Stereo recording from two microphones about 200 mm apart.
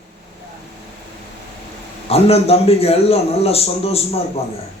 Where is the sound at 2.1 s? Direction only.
30° left (ahead or behind).